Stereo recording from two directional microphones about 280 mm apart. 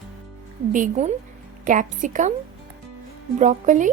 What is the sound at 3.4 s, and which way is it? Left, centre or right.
Speech, right.